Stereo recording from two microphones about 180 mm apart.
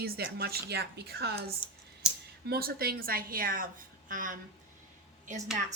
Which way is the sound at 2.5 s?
55° right (ahead or behind).